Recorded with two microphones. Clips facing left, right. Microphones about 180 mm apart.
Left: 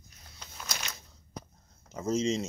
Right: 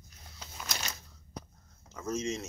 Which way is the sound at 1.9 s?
20° left (ahead or behind).